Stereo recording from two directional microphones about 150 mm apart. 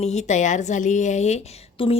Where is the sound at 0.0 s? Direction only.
50° left (ahead or behind).